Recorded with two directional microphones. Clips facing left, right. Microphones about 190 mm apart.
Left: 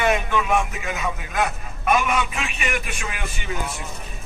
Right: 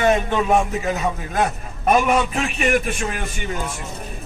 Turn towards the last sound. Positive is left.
turn(degrees=-45)  # may be behind; listen again after turning